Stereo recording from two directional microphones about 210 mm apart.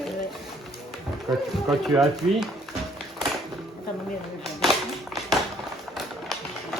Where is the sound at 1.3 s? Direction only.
Centre (ahead or behind).